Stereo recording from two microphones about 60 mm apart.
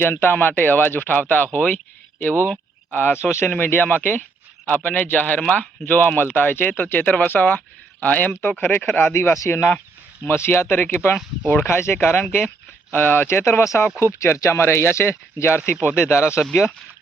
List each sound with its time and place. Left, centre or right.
0.0 s speech: left
2.9 s speech: left
9.1 s speech: left
13.2 s speech: left
14.2 s speech: left
14.6 s speech: left